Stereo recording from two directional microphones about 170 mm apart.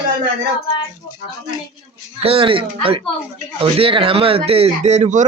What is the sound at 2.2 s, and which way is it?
Speech, 35° right (ahead or behind).